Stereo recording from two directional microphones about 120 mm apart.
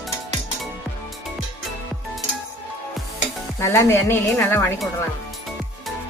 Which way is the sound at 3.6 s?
25° left (ahead or behind).